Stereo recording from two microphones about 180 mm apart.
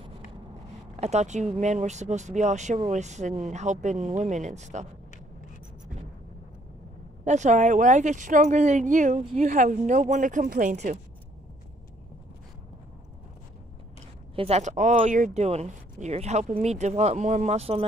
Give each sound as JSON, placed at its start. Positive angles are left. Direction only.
{"t": 0.9, "sound": "speech", "side_deg": -35}
{"t": 7.2, "sound": "speech", "side_deg": -40}
{"t": 14.3, "sound": "speech", "side_deg": -35}